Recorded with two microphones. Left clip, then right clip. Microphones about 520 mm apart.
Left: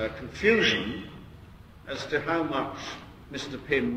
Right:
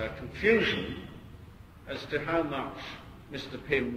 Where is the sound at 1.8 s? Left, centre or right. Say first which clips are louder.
Left 4 dB; left.